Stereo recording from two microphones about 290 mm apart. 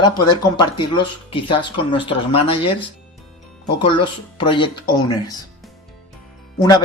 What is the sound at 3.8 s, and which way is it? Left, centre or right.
Speech, centre.